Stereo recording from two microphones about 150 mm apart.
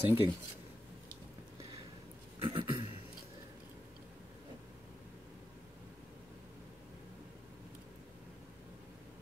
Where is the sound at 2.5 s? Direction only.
30° right (ahead or behind).